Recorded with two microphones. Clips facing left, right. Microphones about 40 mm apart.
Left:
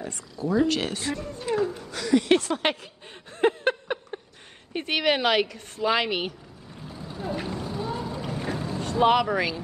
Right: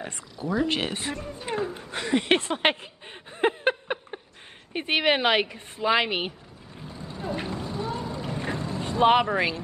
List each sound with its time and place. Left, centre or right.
0.5 s a woman's voice: right
3.3 s a sound: centre
4.7 s a woman's voice: right
6.8 s vehicle: centre
9.0 s a woman's voice: right